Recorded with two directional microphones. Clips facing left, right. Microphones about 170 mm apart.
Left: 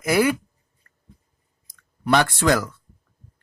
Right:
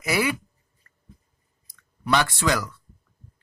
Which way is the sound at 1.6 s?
50° left (ahead or behind).